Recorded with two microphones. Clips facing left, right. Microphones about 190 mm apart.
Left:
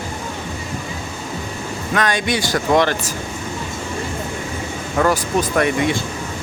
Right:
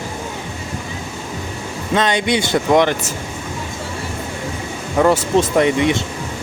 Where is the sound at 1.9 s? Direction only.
25° right (ahead or behind).